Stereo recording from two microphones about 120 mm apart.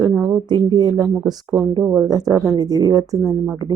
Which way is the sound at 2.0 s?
30° right (ahead or behind).